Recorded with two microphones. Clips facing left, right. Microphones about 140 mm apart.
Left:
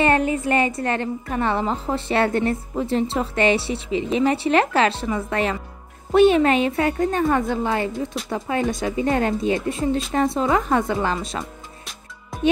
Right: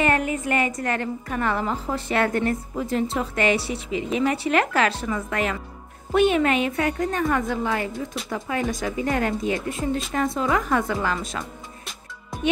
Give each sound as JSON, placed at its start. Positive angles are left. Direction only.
{"t": 0.0, "sound": "a woman's voice", "side_deg": 30}